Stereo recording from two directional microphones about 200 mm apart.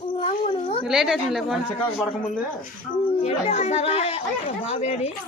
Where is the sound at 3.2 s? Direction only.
30° left (ahead or behind).